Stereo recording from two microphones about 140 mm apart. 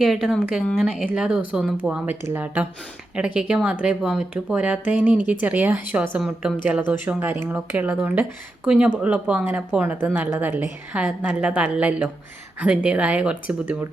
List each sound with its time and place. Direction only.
0.0 s a woman's voice: 5° right (ahead or behind)